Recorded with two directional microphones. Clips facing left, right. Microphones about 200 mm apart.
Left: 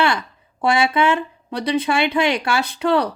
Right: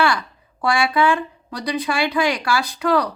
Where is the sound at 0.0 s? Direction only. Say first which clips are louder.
Even; 25° left (ahead or behind).